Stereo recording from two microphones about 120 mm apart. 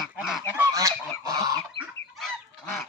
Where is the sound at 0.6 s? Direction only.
25° right (ahead or behind).